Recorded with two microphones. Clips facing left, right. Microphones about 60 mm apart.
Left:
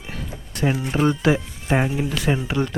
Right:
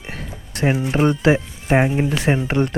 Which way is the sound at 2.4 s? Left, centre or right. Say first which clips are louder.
Right 4 dB; right.